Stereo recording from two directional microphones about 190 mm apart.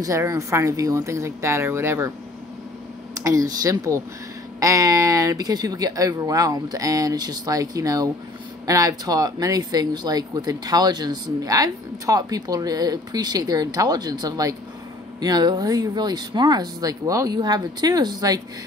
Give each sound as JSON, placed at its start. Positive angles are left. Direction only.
{"t": 0.0, "sound": "speech", "side_deg": -15}
{"t": 3.2, "sound": "speech", "side_deg": -15}